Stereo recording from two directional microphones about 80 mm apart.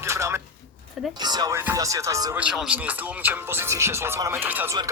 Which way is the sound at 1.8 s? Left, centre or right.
Right.